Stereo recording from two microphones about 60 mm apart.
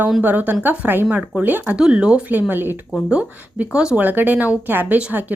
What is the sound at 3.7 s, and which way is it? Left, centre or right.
Speech, centre.